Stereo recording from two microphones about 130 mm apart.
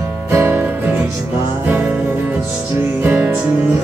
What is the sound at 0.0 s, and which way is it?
Music, 20° right (ahead or behind).